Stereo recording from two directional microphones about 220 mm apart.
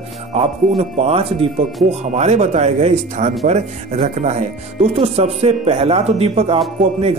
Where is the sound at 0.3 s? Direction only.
30° right (ahead or behind).